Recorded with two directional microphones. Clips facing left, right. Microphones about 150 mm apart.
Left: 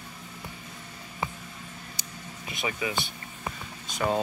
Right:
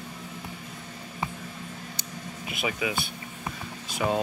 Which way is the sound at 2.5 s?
10° right (ahead or behind).